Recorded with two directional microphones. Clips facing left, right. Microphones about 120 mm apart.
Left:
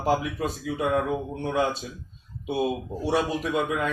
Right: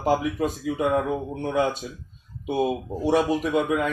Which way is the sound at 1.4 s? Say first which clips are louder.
Right 2 dB; 10° right (ahead or behind).